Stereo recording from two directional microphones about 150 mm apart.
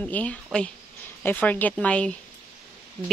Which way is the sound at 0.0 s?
10° left (ahead or behind).